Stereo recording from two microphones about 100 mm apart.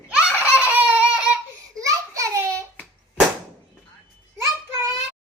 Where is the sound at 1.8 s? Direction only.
30° right (ahead or behind).